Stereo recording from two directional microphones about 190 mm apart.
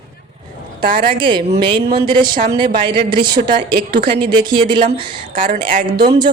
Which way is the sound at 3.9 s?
55° right (ahead or behind).